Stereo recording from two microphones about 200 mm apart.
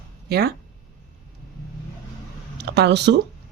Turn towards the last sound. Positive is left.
turn(degrees=-60)  # may be behind; listen again after turning